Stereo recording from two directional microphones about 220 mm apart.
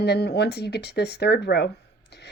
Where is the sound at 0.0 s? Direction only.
50° left (ahead or behind).